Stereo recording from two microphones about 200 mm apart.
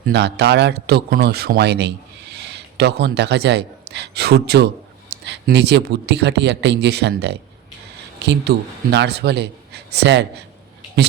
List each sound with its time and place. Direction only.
0.0 s speech: 55° right (ahead or behind)